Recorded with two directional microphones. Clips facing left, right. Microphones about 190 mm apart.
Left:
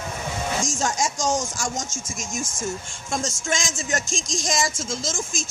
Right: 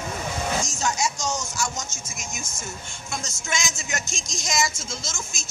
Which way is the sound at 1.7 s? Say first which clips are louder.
Left 4 dB; 90° left.